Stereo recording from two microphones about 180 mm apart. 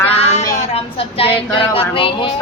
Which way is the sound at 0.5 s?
35° left (ahead or behind).